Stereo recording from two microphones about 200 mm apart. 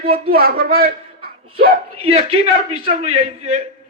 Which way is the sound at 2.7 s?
30° right (ahead or behind).